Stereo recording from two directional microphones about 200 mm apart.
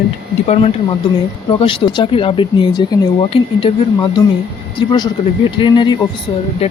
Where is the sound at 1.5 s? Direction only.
25° left (ahead or behind).